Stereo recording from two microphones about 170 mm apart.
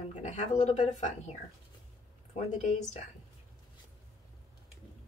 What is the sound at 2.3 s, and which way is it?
Speech, 45° left (ahead or behind).